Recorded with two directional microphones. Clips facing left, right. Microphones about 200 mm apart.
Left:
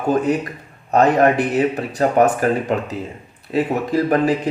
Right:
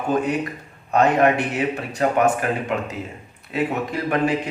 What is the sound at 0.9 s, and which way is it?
A man's voice, 40° left (ahead or behind).